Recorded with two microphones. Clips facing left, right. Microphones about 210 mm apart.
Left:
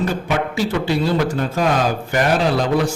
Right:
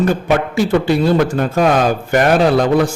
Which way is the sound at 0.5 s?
50° right (ahead or behind).